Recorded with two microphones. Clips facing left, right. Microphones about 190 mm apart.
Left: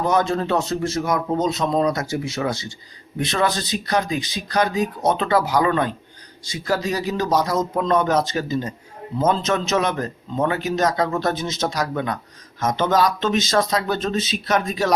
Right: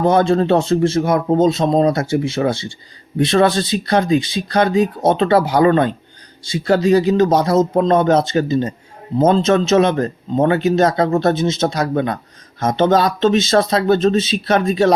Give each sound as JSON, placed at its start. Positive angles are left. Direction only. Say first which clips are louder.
{"t": 0.0, "sound": "speech", "louder": "right 6 dB", "side_deg": -30}